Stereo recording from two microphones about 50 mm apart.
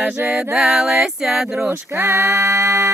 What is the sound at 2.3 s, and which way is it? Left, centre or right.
Music, centre.